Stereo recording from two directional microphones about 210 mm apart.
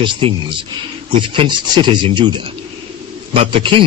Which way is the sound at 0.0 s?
25° right (ahead or behind).